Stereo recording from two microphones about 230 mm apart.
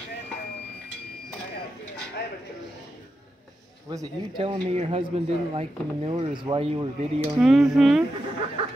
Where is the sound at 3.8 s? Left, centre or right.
Centre.